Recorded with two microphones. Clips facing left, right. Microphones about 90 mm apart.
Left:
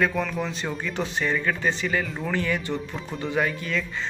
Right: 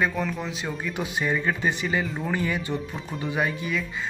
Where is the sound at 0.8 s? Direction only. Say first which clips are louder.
Even; 15° right (ahead or behind).